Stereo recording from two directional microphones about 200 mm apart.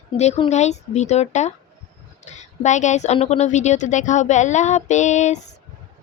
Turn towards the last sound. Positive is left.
turn(degrees=35)  # may be behind; listen again after turning